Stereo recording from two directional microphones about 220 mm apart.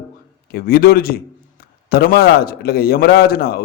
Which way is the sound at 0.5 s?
40° left (ahead or behind).